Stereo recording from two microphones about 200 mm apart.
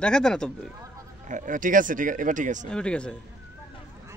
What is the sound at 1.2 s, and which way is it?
Speech, 40° right (ahead or behind).